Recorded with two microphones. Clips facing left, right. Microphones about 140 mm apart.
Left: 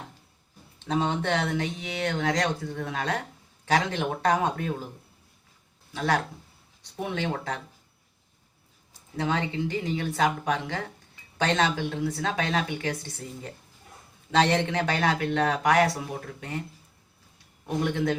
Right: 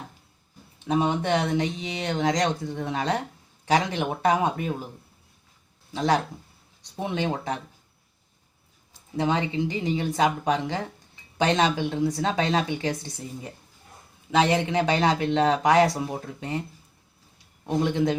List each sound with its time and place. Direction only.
0.9 s speech: 10° right (ahead or behind)
5.9 s speech: 20° right (ahead or behind)
9.1 s speech: 20° right (ahead or behind)
17.7 s speech: 20° right (ahead or behind)